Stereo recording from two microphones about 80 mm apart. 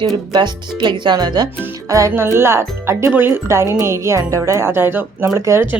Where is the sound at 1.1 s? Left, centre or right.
Right.